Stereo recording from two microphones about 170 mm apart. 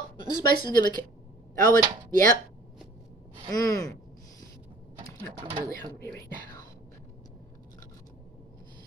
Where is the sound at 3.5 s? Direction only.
20° left (ahead or behind).